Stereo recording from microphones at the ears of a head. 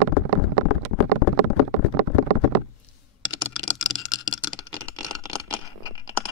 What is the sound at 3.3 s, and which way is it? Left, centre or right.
Computer keyboard, left.